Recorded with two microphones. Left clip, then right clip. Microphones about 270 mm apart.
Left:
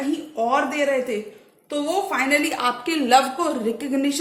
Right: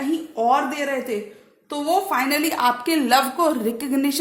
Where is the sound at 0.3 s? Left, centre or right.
Right.